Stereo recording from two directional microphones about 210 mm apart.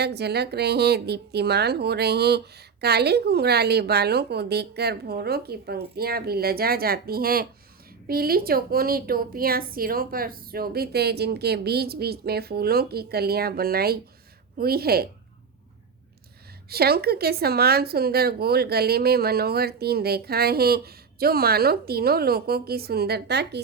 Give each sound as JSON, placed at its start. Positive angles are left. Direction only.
{"t": 0.0, "sound": "a woman's voice", "side_deg": -50}
{"t": 16.6, "sound": "a woman's voice", "side_deg": -50}